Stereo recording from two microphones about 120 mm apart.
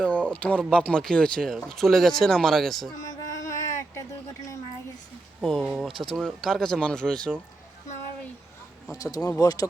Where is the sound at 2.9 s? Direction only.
30° left (ahead or behind).